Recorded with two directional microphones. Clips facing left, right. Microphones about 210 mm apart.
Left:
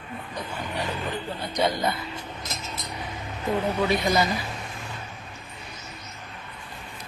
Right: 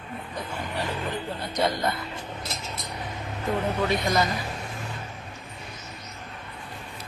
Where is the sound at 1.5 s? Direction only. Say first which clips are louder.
Left 1 dB; centre (ahead or behind).